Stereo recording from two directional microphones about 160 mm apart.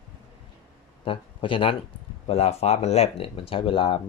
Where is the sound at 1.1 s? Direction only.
30° left (ahead or behind).